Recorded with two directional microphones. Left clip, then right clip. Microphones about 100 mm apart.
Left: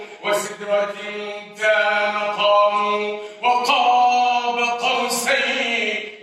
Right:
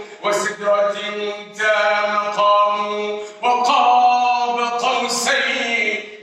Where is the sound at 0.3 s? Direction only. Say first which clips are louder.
Right 4 dB; 30° right (ahead or behind).